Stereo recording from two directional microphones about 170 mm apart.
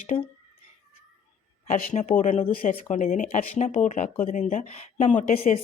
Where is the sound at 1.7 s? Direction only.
50° left (ahead or behind).